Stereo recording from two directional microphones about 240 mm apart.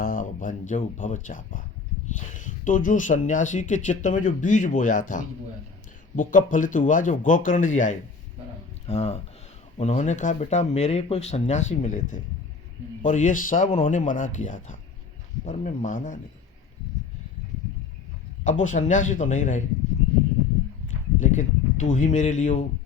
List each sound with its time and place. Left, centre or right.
0.0 s speech: left
18.4 s speech: left
21.2 s speech: left